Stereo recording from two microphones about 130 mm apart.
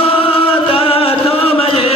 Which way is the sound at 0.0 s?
45° left (ahead or behind).